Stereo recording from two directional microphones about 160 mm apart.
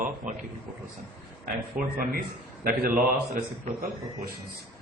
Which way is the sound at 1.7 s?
60° right (ahead or behind).